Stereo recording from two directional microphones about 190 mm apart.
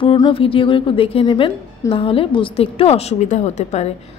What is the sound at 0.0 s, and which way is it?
A woman's voice, 30° left (ahead or behind).